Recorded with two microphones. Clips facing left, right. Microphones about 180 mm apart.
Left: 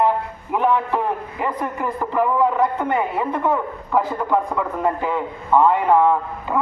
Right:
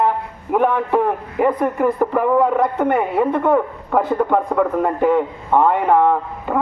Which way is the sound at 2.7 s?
65° right (ahead or behind).